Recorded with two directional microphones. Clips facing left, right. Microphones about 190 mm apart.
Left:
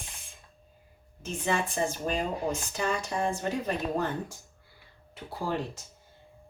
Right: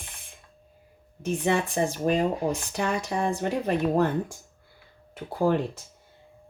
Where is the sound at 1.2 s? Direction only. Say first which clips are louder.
Right 5 dB; 65° right (ahead or behind).